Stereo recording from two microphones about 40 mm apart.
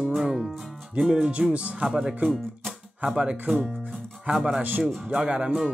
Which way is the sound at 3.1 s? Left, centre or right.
Right.